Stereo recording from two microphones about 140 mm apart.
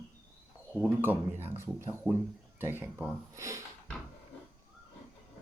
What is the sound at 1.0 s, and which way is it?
Speech, 15° right (ahead or behind).